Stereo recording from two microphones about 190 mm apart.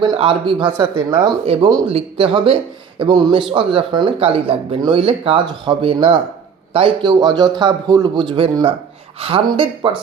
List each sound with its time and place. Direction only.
0.0 s speech: 25° right (ahead or behind)